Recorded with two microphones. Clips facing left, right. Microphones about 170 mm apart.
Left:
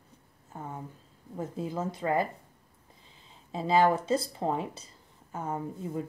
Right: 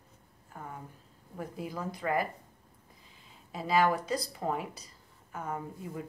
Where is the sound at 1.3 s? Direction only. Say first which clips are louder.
Left 5 dB; 25° left (ahead or behind).